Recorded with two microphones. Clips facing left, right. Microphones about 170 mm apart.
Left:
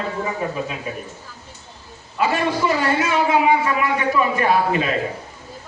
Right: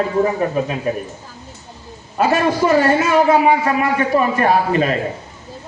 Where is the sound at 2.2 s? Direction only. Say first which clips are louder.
Right 4 dB; 45° right (ahead or behind).